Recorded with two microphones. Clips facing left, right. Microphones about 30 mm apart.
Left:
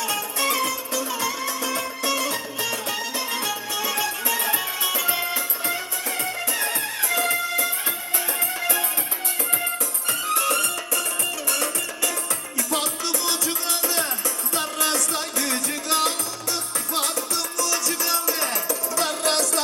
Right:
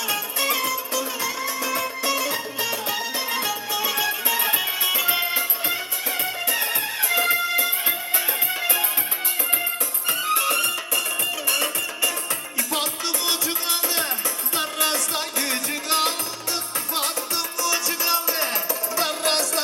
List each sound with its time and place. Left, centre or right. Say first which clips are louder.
0.1 s music: right 2 dB; centre
10.1 s music: right 1 dB; centre